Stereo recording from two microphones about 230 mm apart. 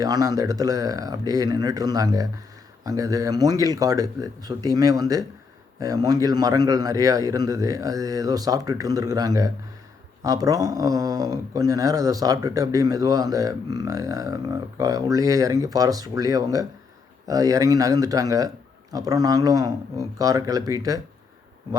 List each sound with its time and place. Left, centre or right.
0.0 s speech: centre